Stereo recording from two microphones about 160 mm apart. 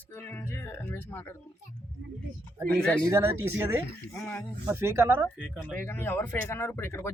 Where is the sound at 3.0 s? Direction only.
15° right (ahead or behind).